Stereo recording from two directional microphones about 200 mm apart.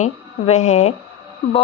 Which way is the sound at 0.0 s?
35° left (ahead or behind).